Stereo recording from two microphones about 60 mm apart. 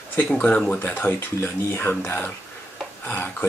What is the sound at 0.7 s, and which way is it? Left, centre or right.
Speech, left.